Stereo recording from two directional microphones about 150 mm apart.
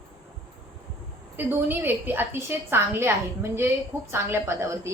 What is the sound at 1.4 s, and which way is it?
A woman's voice, 15° right (ahead or behind).